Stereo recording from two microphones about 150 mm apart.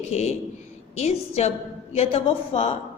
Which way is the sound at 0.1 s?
45° left (ahead or behind).